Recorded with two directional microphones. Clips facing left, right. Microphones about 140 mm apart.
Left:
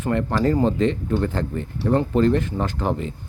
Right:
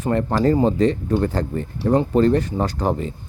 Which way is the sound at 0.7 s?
40° right (ahead or behind).